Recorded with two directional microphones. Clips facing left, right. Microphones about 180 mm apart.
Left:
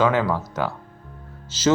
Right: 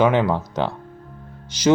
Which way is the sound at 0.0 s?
20° right (ahead or behind).